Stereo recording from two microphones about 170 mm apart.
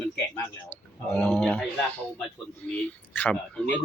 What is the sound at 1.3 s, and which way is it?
Speech, 5° left (ahead or behind).